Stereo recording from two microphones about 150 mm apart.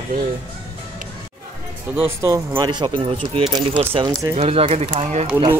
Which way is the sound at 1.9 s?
15° right (ahead or behind).